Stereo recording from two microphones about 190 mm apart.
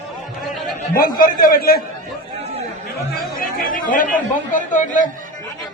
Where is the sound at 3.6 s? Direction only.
45° left (ahead or behind).